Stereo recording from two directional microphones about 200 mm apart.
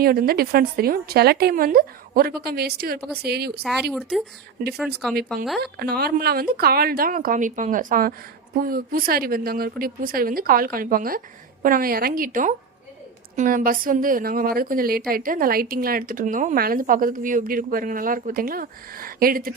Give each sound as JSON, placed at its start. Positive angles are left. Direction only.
{"t": 0.0, "sound": "a woman's voice", "side_deg": -50}
{"t": 3.6, "sound": "speech", "side_deg": 0}
{"t": 5.5, "sound": "a woman's voice", "side_deg": -50}